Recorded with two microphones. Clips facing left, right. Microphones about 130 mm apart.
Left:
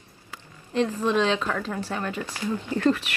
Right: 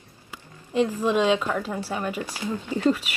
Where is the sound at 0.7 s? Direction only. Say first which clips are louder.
Right 1 dB; 10° right (ahead or behind).